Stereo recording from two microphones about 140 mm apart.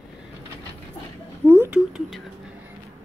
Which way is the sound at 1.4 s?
15° right (ahead or behind).